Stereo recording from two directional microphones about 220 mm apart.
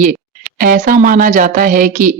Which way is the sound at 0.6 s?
40° right (ahead or behind).